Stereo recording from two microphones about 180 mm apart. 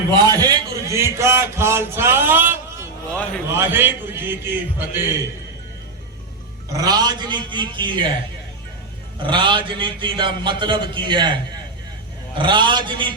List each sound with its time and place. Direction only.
0.3 s speech: 20° right (ahead or behind)
3.1 s a man's voice: 5° left (ahead or behind)
3.5 s mantra: 10° right (ahead or behind)
6.7 s a man's voice: 20° right (ahead or behind)
9.2 s a man's voice: 25° right (ahead or behind)
12.4 s a man's voice: 25° right (ahead or behind)